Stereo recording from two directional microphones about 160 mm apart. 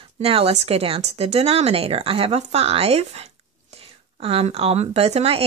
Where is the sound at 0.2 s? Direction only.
40° right (ahead or behind).